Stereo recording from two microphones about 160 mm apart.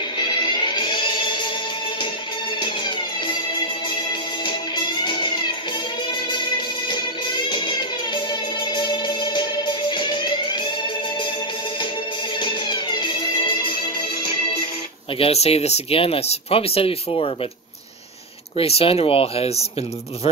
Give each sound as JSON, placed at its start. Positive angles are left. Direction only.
{"t": 0.2, "sound": "music", "side_deg": 30}
{"t": 4.5, "sound": "music", "side_deg": 30}
{"t": 6.9, "sound": "music", "side_deg": 30}
{"t": 12.4, "sound": "music", "side_deg": 30}
{"t": 15.1, "sound": "speech", "side_deg": 40}
{"t": 18.6, "sound": "speech", "side_deg": 35}